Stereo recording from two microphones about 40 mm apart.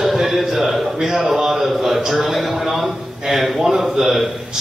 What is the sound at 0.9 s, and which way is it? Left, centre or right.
A man's voice, centre.